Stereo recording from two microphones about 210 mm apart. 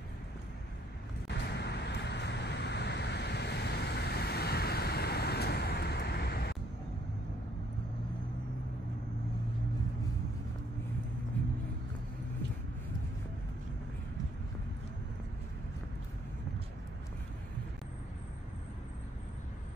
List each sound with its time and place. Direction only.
1.2 s vehicle: 50° left (ahead or behind)